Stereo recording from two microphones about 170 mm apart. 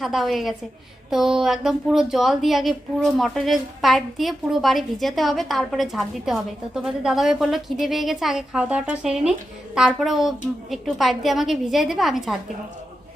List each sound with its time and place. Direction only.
0.0 s a woman's voice: centre (ahead or behind)